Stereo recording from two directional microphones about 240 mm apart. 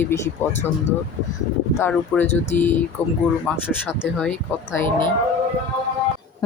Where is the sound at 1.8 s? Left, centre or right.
Centre.